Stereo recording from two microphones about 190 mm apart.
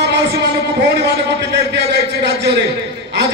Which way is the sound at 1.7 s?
65° right (ahead or behind).